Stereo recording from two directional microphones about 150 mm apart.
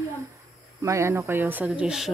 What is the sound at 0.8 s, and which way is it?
Speech, 20° right (ahead or behind).